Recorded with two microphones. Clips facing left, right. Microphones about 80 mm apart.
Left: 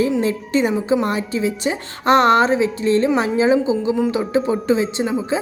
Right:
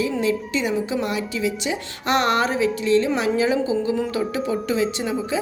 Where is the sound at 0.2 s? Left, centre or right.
Left.